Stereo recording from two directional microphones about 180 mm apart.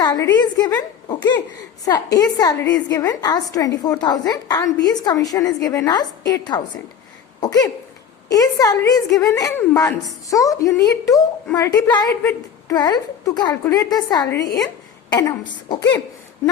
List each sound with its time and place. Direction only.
0.0 s a woman's voice: 20° left (ahead or behind)
1.8 s a woman's voice: 20° left (ahead or behind)
7.4 s a sound: 20° left (ahead or behind)
8.3 s a woman's voice: 20° left (ahead or behind)
14.3 s speech: 70° left (ahead or behind)
15.1 s a woman's voice: 20° left (ahead or behind)